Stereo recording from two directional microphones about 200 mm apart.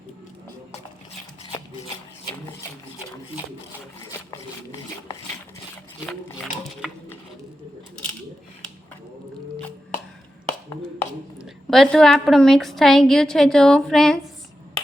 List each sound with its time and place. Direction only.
11.3 s a woman's voice: centre (ahead or behind)